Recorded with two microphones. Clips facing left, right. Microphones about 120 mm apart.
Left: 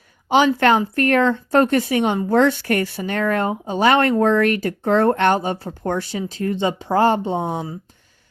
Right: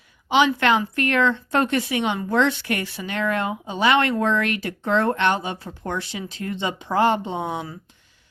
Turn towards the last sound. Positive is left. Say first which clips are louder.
# left 4 dB
turn(degrees=35)  # may be behind; listen again after turning